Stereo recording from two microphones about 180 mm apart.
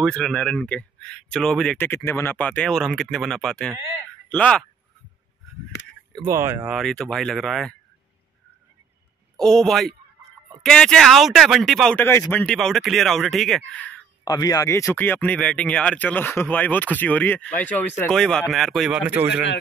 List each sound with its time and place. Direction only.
0.0 s speech: centre (ahead or behind)
1.9 s speech: 15° left (ahead or behind)
6.2 s speech: 15° right (ahead or behind); by 7.7 s centre (ahead or behind)
9.4 s speech: 5° left (ahead or behind)
14.2 s speech: 20° left (ahead or behind); by 19.2 s 10° right (ahead or behind)
19.3 s a man's voice: 80° left